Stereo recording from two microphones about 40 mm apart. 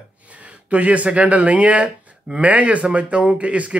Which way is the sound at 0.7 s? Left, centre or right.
Right.